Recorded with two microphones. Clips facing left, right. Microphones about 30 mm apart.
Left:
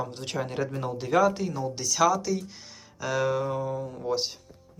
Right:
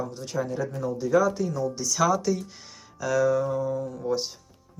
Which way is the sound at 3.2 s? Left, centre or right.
Left.